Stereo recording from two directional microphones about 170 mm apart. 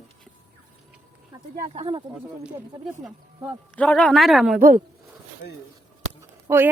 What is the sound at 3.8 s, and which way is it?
Speech, 5° left (ahead or behind).